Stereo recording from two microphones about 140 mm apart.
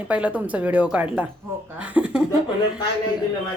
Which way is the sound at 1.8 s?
10° right (ahead or behind).